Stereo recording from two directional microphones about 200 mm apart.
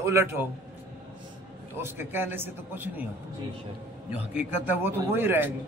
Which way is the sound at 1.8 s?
10° right (ahead or behind).